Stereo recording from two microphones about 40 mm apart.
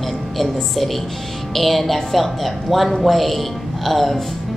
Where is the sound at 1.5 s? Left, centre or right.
Centre.